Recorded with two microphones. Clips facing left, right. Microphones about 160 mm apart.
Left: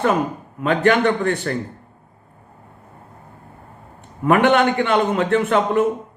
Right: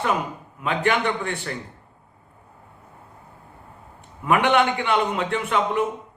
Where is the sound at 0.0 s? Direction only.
45° left (ahead or behind).